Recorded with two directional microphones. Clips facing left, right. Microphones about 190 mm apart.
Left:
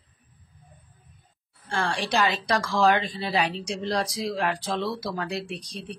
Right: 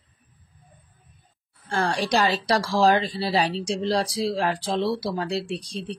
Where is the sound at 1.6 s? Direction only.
40° right (ahead or behind).